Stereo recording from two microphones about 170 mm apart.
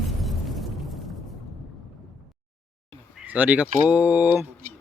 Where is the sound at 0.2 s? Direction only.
Centre (ahead or behind).